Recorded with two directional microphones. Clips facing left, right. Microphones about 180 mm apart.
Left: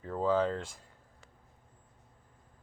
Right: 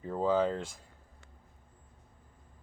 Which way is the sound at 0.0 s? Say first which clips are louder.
Right 1 dB; 15° right (ahead or behind).